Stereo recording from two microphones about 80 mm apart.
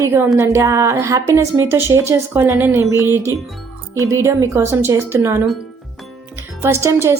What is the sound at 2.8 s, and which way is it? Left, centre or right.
A woman's voice, right.